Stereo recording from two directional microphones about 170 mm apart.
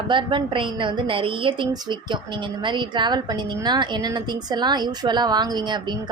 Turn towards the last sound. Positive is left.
turn(degrees=-25)  # may be behind; listen again after turning